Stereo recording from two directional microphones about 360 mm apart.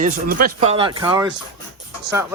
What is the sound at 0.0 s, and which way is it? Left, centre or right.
Speech, right.